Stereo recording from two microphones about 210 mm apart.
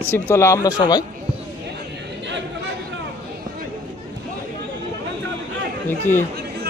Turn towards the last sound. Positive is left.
turn(degrees=10)  # may be behind; listen again after turning